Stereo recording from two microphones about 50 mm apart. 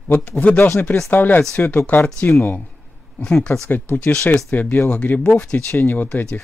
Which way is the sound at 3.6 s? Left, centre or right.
Left.